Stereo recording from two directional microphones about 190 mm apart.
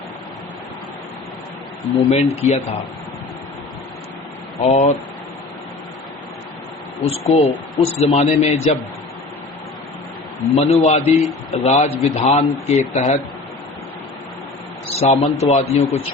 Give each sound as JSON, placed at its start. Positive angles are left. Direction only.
{"t": 2.0, "sound": "speech", "side_deg": 35}
{"t": 4.6, "sound": "speech", "side_deg": 35}
{"t": 7.0, "sound": "speech", "side_deg": 35}
{"t": 10.5, "sound": "speech", "side_deg": 30}
{"t": 11.0, "sound": "a man's voice", "side_deg": 0}
{"t": 11.5, "sound": "speech", "side_deg": 35}
{"t": 14.9, "sound": "speech", "side_deg": 35}